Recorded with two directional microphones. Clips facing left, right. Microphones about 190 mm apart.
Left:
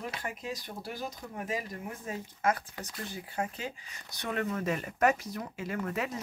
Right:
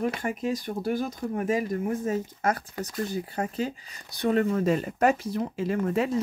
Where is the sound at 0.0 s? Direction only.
50° right (ahead or behind).